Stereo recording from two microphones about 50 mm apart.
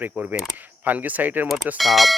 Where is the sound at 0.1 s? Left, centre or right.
Right.